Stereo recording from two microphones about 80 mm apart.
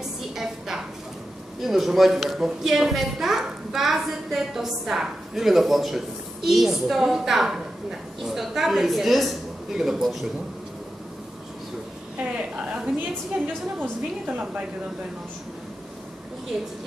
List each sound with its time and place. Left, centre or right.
0.4 s a sound: centre
1.6 s a woman's voice: centre
12.4 s a woman's voice: centre
14.2 s a woman's voice: centre
16.5 s a woman's voice: centre